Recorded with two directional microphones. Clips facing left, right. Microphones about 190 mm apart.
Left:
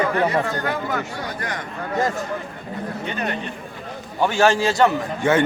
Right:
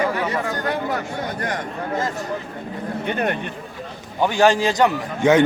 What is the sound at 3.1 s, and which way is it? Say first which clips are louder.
Speech: right 5 dB; 55° right (ahead or behind).